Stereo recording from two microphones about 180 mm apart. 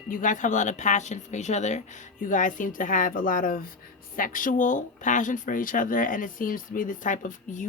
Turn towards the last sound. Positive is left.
turn(degrees=45)  # may be behind; listen again after turning